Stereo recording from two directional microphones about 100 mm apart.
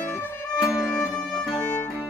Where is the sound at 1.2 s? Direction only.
5° left (ahead or behind).